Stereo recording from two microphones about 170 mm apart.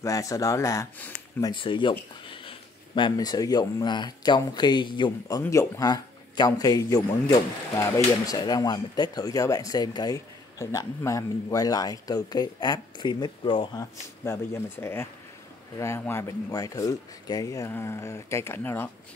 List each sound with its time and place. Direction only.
0.0 s a man's voice: 20° left (ahead or behind)
1.4 s a man's voice: 30° left (ahead or behind)
14.2 s speech: 15° left (ahead or behind)